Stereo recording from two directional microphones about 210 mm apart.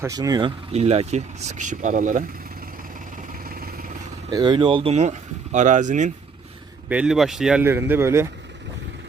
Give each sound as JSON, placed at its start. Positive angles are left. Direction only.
{"t": 0.0, "sound": "speech", "side_deg": -15}
{"t": 3.4, "sound": "vehicle", "side_deg": -45}
{"t": 4.3, "sound": "speech", "side_deg": -20}
{"t": 6.8, "sound": "a man's voice", "side_deg": -5}